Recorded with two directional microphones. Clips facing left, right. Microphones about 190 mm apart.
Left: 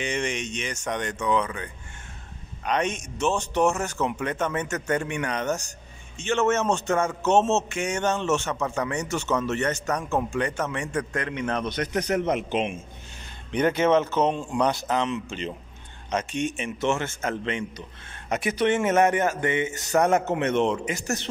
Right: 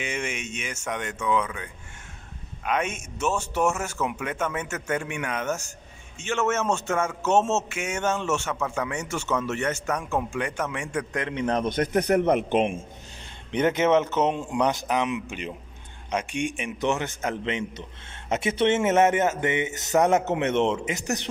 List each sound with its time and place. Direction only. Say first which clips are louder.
0.0 s a man's voice: left 3 dB; 5° right (ahead or behind)
11.2 s a man's voice: right 2 dB; 30° right (ahead or behind)
11.6 s a man's voice: right 4 dB; 50° right (ahead or behind)
13.5 s a man's voice: even; 20° right (ahead or behind)